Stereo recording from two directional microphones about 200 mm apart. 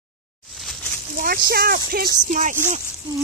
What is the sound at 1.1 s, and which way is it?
Speech, 45° right (ahead or behind).